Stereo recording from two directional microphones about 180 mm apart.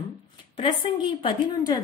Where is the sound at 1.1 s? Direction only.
25° left (ahead or behind).